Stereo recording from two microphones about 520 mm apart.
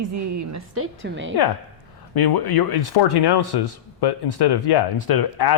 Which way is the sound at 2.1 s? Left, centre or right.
Left.